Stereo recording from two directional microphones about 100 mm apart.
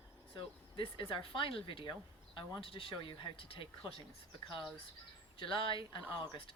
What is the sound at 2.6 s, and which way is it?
Speech, 65° left (ahead or behind).